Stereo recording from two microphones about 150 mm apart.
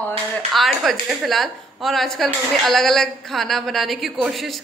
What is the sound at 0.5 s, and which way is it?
A woman's voice, centre (ahead or behind).